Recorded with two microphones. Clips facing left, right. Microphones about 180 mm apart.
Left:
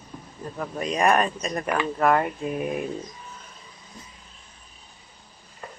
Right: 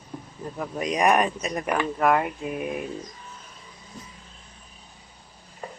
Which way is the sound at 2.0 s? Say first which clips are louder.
Left 2 dB; 5° right (ahead or behind).